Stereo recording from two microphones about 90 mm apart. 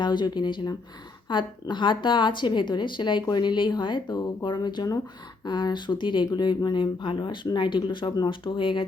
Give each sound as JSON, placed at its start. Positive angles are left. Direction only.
{"t": 0.0, "sound": "speech", "side_deg": 55}
{"t": 8.3, "sound": "speech", "side_deg": 70}